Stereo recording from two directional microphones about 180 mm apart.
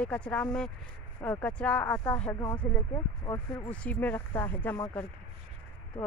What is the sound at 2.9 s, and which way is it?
Speech, 20° left (ahead or behind).